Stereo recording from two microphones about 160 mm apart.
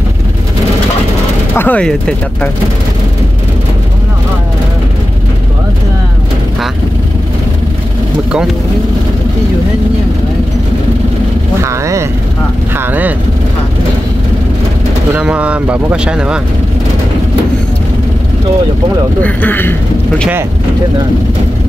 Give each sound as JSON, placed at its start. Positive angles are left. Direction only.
{"t": 1.5, "sound": "speech", "side_deg": 10}
{"t": 11.6, "sound": "vehicle", "side_deg": -20}
{"t": 15.1, "sound": "speech", "side_deg": -10}
{"t": 19.2, "sound": "speech", "side_deg": 10}